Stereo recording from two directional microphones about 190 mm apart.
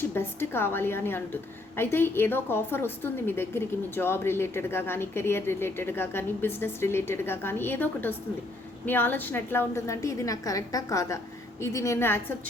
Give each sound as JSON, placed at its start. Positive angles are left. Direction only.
{"t": 0.0, "sound": "a woman's voice", "side_deg": 10}